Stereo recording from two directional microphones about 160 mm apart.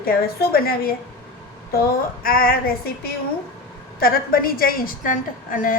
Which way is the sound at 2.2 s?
65° left (ahead or behind).